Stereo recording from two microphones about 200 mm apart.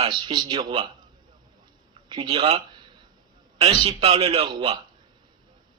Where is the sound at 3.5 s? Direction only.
30° right (ahead or behind).